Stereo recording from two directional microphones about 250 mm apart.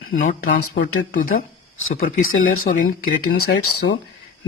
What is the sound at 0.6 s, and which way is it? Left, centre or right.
Speech, left.